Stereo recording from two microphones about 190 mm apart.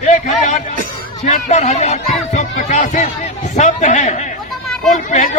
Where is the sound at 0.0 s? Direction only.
35° left (ahead or behind).